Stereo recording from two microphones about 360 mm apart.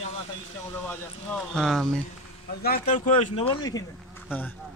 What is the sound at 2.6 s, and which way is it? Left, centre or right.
Speech, left.